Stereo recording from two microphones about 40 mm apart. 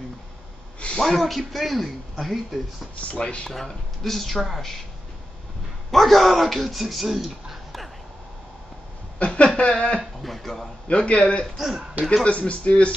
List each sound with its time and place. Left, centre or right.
0.9 s speech: centre
3.0 s a man's voice: left
3.4 s speech: centre
5.9 s a man's voice: centre
9.2 s a sound: left
9.6 s a man's voice: left
10.2 s speech: centre
10.9 s a man's voice: left
11.5 s a man's voice: centre
12.0 s speech: centre
12.3 s speech: left